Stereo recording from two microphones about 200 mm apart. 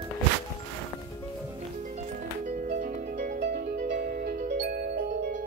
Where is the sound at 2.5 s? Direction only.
40° right (ahead or behind).